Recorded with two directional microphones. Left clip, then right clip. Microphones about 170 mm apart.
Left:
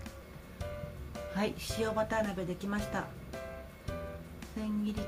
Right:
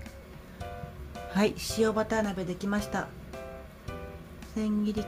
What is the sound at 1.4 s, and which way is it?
Speech, 55° right (ahead or behind).